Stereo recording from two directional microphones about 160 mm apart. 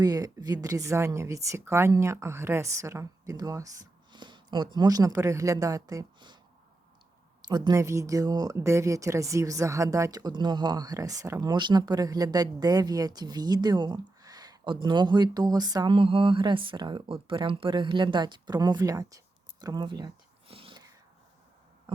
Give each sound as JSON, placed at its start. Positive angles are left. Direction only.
{"t": 0.0, "sound": "speech", "side_deg": -25}
{"t": 7.4, "sound": "speech", "side_deg": -25}
{"t": 20.5, "sound": "whispering", "side_deg": -35}